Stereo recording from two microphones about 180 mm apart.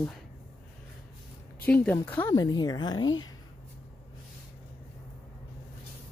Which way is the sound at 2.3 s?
20° left (ahead or behind).